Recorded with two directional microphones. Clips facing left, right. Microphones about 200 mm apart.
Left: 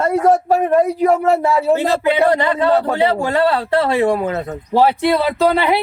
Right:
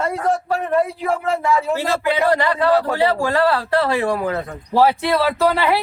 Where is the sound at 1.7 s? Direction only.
20° left (ahead or behind).